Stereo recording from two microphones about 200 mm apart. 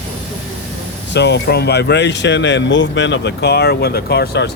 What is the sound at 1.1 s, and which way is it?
Speech, 60° left (ahead or behind).